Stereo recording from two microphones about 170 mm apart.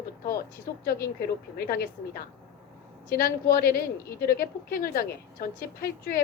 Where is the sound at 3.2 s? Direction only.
60° left (ahead or behind).